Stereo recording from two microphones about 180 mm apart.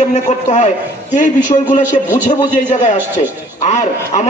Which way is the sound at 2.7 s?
40° left (ahead or behind).